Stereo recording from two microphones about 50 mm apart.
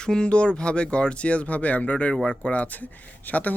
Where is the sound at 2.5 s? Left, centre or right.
Left.